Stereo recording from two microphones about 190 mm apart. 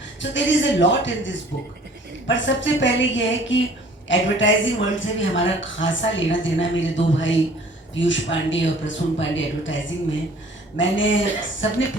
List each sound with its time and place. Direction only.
0.2 s speech: 75° left (ahead or behind)